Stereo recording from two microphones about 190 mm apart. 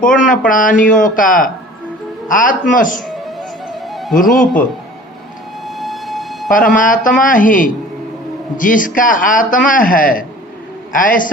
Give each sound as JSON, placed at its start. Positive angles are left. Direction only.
{"t": 0.3, "sound": "speech", "side_deg": 45}
{"t": 3.8, "sound": "music", "side_deg": 0}
{"t": 4.2, "sound": "speech", "side_deg": 45}
{"t": 5.6, "sound": "siren", "side_deg": 0}
{"t": 6.5, "sound": "speech", "side_deg": 45}